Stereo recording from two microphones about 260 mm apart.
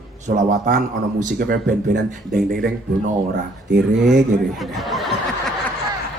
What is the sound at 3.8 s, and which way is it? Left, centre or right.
Speech, centre.